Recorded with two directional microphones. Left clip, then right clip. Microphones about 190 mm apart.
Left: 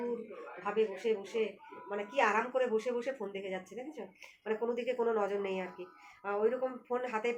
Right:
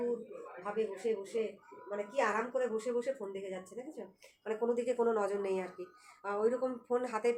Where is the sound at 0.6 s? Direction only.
35° left (ahead or behind).